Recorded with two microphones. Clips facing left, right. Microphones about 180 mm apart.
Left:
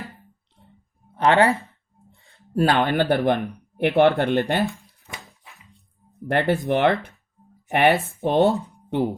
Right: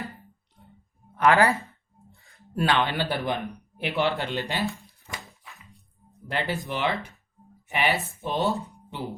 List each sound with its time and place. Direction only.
1.1 s speech: 30° left (ahead or behind)
2.3 s speech: 40° left (ahead or behind); by 4.6 s 60° left (ahead or behind)
4.7 s a sound: centre (ahead or behind)
6.2 s speech: 55° left (ahead or behind)